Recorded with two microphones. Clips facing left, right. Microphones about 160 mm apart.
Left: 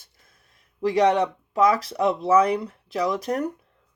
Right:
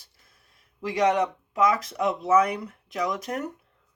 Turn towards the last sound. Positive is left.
turn(degrees=35)  # may be behind; listen again after turning